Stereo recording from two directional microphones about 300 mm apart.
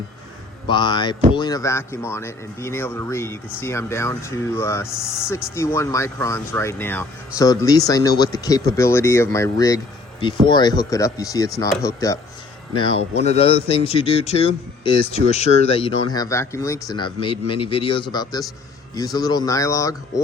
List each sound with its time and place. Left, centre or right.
0.7 s speech: centre